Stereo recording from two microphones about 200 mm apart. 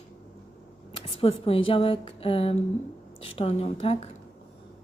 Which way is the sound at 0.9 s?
30° left (ahead or behind).